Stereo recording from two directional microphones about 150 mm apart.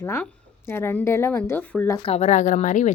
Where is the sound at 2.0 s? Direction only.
45° left (ahead or behind).